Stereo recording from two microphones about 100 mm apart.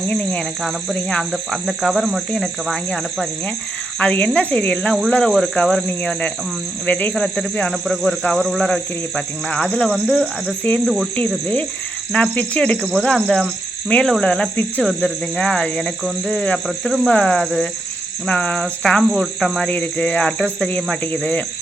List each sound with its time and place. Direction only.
0.1 s speech: 15° left (ahead or behind)
0.6 s speech: 5° left (ahead or behind)
3.9 s speech: 10° left (ahead or behind)
10.8 s speech: centre (ahead or behind)
12.1 s speech: 10° left (ahead or behind)
16.6 s speech: centre (ahead or behind)
17.1 s speech: 10° left (ahead or behind)
19.5 s speech: 15° left (ahead or behind)